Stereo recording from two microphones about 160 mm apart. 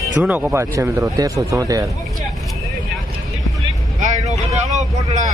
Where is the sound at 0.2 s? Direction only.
5° right (ahead or behind); by 1.9 s 20° right (ahead or behind).